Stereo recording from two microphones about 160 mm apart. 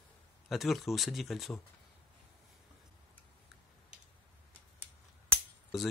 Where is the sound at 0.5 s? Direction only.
Centre (ahead or behind).